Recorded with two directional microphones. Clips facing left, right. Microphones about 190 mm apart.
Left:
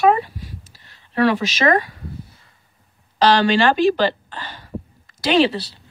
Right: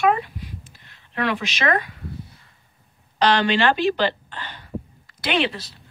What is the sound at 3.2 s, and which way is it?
A woman's voice, 40° left (ahead or behind).